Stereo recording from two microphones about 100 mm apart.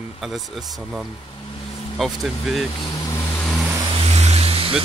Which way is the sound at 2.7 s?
40° left (ahead or behind).